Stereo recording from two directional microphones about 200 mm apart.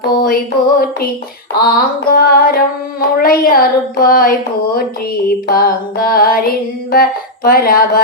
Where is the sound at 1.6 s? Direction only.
45° left (ahead or behind).